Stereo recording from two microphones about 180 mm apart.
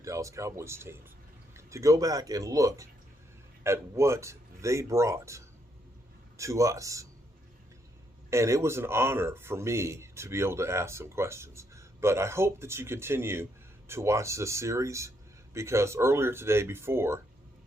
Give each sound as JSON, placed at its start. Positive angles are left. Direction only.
{"t": 0.0, "sound": "a man's voice", "side_deg": -15}
{"t": 8.3, "sound": "a man's voice", "side_deg": -15}